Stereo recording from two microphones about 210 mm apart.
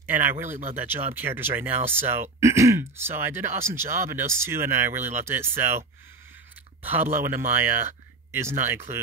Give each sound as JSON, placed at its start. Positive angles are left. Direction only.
{"t": 0.0, "sound": "speech", "side_deg": -10}
{"t": 6.8, "sound": "speech", "side_deg": -10}